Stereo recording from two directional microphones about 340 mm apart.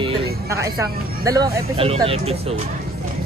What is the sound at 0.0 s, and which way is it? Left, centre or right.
Music, centre.